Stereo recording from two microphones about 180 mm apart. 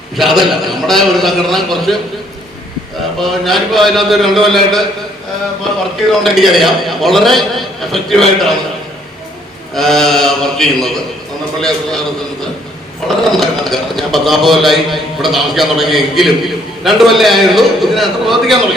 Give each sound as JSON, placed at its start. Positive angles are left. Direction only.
{"t": 0.2, "sound": "a man's voice", "side_deg": 0}
{"t": 3.2, "sound": "a man's voice", "side_deg": 0}
{"t": 6.1, "sound": "a man's voice", "side_deg": 0}
{"t": 9.7, "sound": "a man's voice", "side_deg": 0}
{"t": 13.3, "sound": "a man's voice", "side_deg": 0}